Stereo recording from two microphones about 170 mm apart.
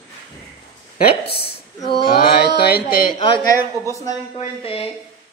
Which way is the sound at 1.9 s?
65° left (ahead or behind).